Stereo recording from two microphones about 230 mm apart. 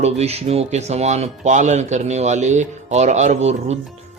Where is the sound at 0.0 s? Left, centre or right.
Right.